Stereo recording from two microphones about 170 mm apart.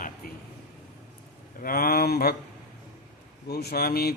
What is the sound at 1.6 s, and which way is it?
Speech, 60° left (ahead or behind).